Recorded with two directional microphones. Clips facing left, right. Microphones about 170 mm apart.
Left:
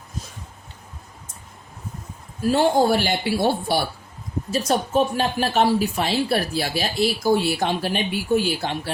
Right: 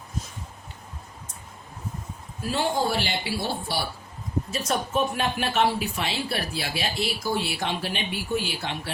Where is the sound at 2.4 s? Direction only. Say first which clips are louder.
Left 8 dB; 45° left (ahead or behind).